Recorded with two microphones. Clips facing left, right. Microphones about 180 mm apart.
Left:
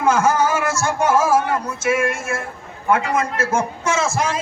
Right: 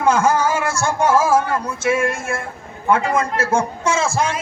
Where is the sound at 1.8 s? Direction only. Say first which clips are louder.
Right 1 dB; 30° right (ahead or behind).